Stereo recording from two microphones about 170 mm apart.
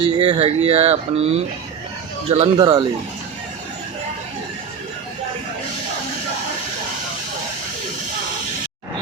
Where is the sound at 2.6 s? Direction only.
25° right (ahead or behind).